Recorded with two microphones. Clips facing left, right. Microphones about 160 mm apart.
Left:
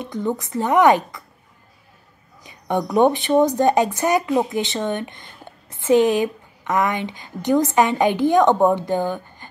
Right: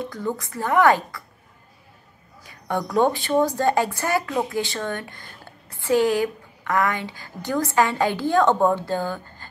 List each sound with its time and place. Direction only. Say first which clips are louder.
0.0 s a woman's voice: left 3 dB; 20° left (ahead or behind)
2.4 s a woman's voice: left 4 dB; 20° left (ahead or behind)